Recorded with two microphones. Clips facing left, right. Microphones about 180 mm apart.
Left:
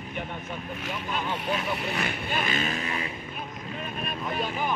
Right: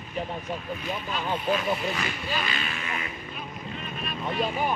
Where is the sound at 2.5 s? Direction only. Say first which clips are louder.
Left 4 dB; 40° left (ahead or behind).